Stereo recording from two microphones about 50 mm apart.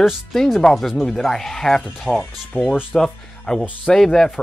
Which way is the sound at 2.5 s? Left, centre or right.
Centre.